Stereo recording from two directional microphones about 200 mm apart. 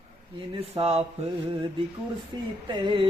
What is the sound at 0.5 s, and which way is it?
Speech, 30° right (ahead or behind).